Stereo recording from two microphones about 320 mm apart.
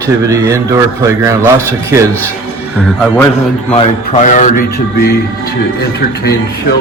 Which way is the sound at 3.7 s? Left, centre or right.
Centre.